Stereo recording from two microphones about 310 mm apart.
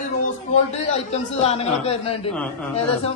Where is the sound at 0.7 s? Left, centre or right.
Centre.